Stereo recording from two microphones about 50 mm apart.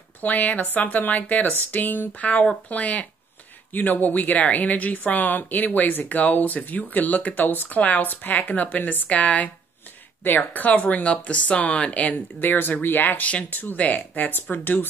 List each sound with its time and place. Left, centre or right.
0.2 s speech: left
10.2 s speech: left
12.4 s speech: left
13.3 s speech: left